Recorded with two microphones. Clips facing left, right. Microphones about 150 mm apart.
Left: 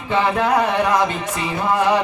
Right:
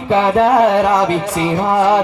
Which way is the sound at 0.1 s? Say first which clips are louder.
Right 6 dB; 30° right (ahead or behind).